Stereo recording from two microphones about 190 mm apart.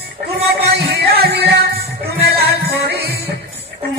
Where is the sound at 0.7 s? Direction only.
60° right (ahead or behind).